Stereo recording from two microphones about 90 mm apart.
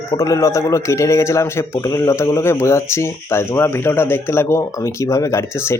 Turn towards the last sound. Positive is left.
turn(degrees=30)  # may be behind; listen again after turning